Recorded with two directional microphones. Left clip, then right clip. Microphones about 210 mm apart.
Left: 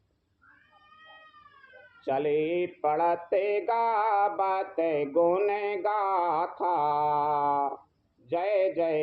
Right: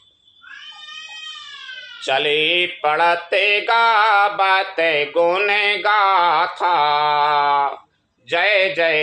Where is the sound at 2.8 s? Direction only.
50° right (ahead or behind).